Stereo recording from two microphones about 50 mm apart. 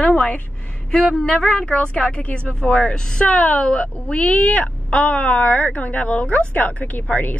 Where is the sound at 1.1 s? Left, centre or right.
Centre.